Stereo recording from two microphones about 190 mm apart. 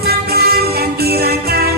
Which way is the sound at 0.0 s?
55° right (ahead or behind).